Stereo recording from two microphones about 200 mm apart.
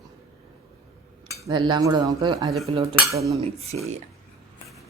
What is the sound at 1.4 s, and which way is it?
Speech, 20° right (ahead or behind).